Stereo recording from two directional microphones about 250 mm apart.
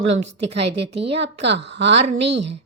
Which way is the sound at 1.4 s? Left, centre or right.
Right.